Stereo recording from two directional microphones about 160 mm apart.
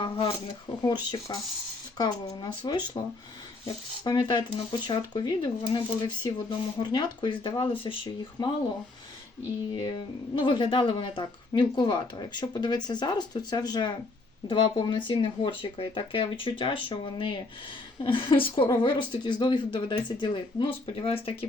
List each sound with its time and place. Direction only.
0.0 s speech: 30° left (ahead or behind)
4.0 s speech: 25° left (ahead or behind)
9.7 s speech: 30° left (ahead or behind)